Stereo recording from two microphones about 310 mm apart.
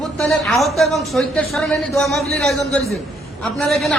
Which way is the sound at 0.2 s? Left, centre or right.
Centre.